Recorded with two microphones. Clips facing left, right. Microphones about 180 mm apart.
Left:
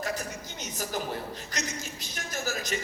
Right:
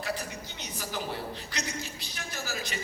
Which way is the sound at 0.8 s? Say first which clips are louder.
Left 2 dB; 40° left (ahead or behind).